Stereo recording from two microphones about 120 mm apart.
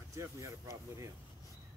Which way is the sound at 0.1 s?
25° right (ahead or behind).